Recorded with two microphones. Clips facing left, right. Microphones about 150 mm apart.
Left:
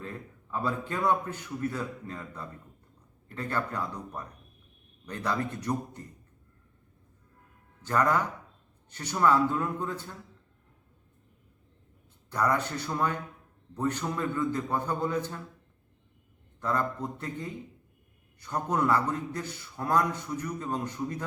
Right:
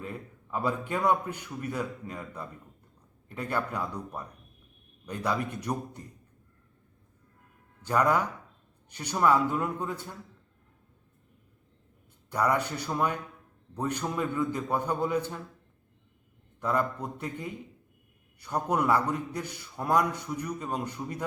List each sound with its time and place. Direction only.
0.0 s a man's voice: 10° right (ahead or behind)
7.9 s a man's voice: 10° right (ahead or behind)
12.3 s a man's voice: 10° right (ahead or behind)
16.6 s a man's voice: 10° right (ahead or behind)